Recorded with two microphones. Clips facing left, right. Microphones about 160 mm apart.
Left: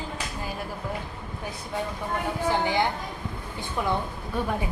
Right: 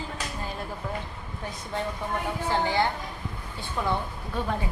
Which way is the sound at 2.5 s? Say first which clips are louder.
Left 1 dB; 15° left (ahead or behind).